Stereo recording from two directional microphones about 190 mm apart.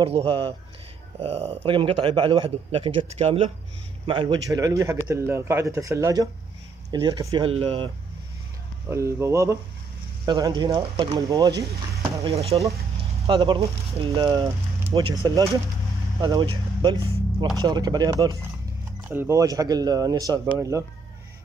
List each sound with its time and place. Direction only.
0.0 s a man's voice: 30° right (ahead or behind)
8.9 s a man's voice: 15° right (ahead or behind)
12.3 s speech: 30° right (ahead or behind)
13.3 s a man's voice: 20° right (ahead or behind)